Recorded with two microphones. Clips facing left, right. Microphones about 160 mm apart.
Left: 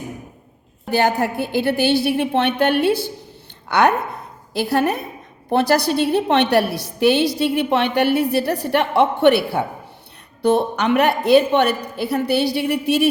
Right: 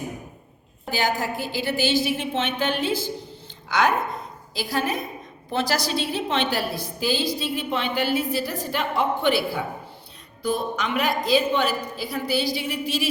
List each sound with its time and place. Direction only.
0.9 s a woman's voice: 65° left (ahead or behind)